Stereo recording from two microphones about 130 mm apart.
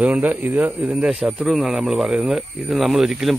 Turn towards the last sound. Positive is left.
turn(degrees=-5)  # may be behind; listen again after turning